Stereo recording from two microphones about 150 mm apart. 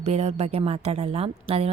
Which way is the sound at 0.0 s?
45° right (ahead or behind).